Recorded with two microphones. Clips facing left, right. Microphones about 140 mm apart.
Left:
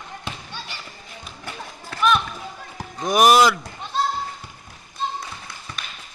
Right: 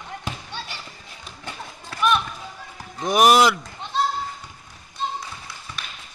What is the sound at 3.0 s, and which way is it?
Speech, 15° left (ahead or behind).